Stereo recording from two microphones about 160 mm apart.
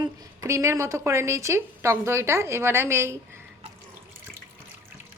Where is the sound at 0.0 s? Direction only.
20° right (ahead or behind).